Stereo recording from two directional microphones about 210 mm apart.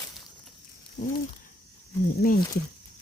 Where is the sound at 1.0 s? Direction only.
50° left (ahead or behind).